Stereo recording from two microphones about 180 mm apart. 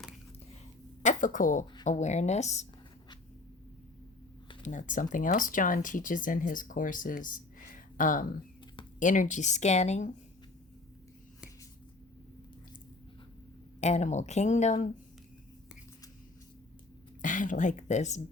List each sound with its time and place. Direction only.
1.0 s speech: 45° left (ahead or behind)
4.6 s speech: 45° left (ahead or behind)
13.8 s speech: 40° left (ahead or behind)
17.2 s speech: 45° left (ahead or behind)